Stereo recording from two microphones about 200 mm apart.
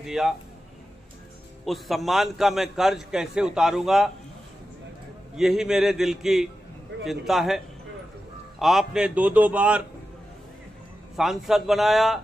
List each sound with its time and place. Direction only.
0.0 s a man's voice: centre (ahead or behind)
1.6 s a man's voice: centre (ahead or behind)
5.3 s a man's voice: 5° right (ahead or behind)
11.1 s a man's voice: centre (ahead or behind)